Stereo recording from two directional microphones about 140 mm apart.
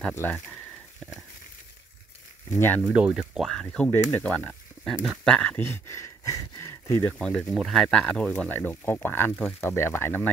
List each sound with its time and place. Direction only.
0.1 s speech: 10° left (ahead or behind)
2.5 s speech: 15° left (ahead or behind)
2.8 s speech: 10° right (ahead or behind); by 7.2 s 20° left (ahead or behind)
7.2 s speech: 5° left (ahead or behind)